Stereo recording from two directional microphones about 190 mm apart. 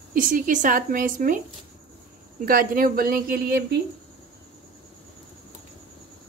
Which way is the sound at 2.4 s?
50° right (ahead or behind).